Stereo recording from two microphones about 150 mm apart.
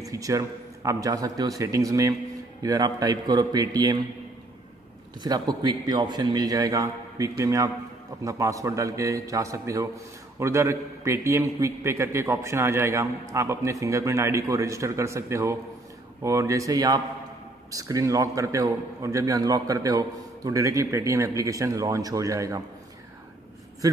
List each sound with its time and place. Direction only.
0.0 s a man's voice: 20° right (ahead or behind)
5.2 s a man's voice: 25° right (ahead or behind)
23.8 s a man's voice: 25° right (ahead or behind)